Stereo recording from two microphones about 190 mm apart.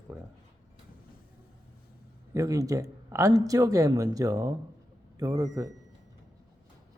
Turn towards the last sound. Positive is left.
turn(degrees=-20)  # may be behind; listen again after turning